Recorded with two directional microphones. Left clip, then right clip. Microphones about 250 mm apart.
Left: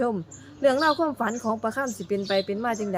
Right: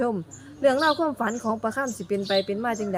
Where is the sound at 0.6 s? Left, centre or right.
Centre.